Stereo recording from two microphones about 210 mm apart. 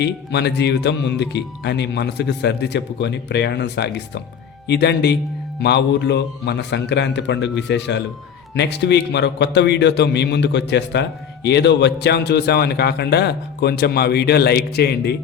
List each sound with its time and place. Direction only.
0.0 s a man's voice: 55° left (ahead or behind)